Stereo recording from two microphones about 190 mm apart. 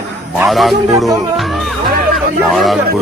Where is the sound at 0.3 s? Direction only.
Centre (ahead or behind).